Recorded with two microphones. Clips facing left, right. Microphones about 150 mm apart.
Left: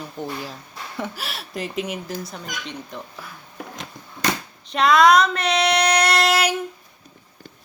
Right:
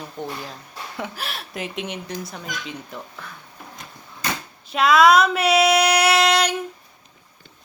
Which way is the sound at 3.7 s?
90° left.